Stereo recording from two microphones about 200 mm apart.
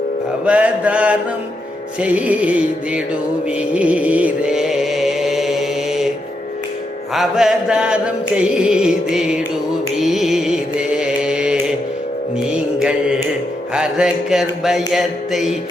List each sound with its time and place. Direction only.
0.4 s music: 5° right (ahead or behind)
7.1 s music: centre (ahead or behind)
13.7 s music: 5° right (ahead or behind)